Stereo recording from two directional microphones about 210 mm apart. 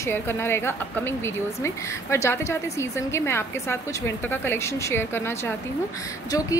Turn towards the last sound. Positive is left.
turn(degrees=15)  # may be behind; listen again after turning